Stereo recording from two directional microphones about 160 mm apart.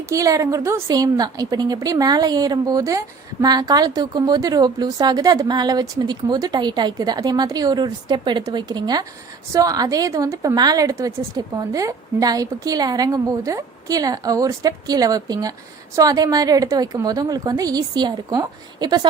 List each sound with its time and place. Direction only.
0.1 s a woman's voice: 20° right (ahead or behind)